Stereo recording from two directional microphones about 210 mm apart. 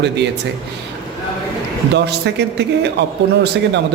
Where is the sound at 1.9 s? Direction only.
55° right (ahead or behind).